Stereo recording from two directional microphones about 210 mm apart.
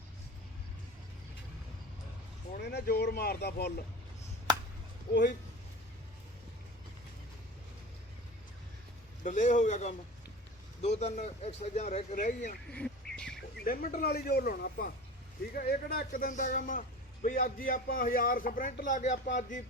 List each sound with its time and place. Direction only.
2.5 s speech: 50° left (ahead or behind)
9.2 s speech: 35° left (ahead or behind)
12.7 s duck: 5° left (ahead or behind)
13.7 s speech: 45° left (ahead or behind)